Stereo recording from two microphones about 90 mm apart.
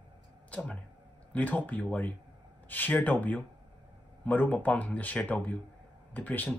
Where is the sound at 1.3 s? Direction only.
15° left (ahead or behind).